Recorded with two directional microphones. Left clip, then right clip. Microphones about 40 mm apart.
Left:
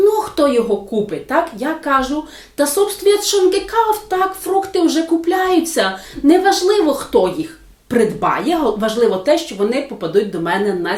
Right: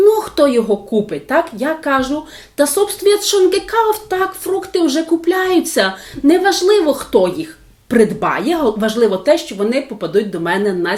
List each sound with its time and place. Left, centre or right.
0.0 s a child's voice: right